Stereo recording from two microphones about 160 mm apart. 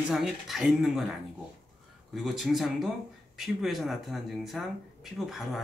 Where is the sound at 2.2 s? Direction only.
Centre (ahead or behind).